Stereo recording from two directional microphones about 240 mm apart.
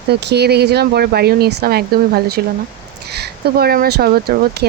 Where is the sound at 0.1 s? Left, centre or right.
Right.